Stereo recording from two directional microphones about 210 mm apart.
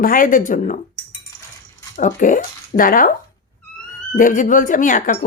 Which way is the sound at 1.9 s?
40° left (ahead or behind).